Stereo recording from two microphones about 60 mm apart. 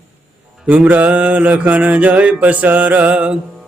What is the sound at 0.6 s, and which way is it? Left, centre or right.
Mantra, right.